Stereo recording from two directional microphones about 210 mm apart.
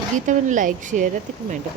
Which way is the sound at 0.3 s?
35° right (ahead or behind).